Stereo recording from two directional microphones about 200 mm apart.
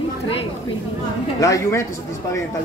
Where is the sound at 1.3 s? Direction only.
15° left (ahead or behind).